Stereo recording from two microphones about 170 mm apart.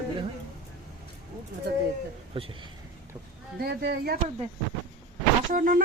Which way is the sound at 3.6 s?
65° right (ahead or behind).